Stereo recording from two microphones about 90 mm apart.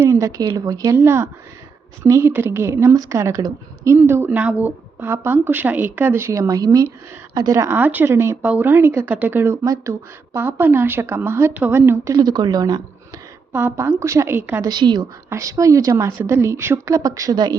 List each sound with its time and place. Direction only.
0.0 s a sound: 35° right (ahead or behind)
0.5 s speech: 45° right (ahead or behind)
0.9 s a woman's voice: 30° right (ahead or behind)
3.9 s a woman's voice: 20° right (ahead or behind)
7.8 s a woman's voice: 20° right (ahead or behind)
12.0 s speech: 45° right (ahead or behind)
13.5 s a woman's voice: 20° right (ahead or behind)
14.3 s a woman's voice: 20° right (ahead or behind)
14.6 s speech: 55° right (ahead or behind)
15.3 s a woman's voice: 35° right (ahead or behind)
17.0 s a woman's voice: 40° right (ahead or behind)